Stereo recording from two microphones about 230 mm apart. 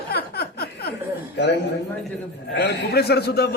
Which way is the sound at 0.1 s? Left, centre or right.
Left.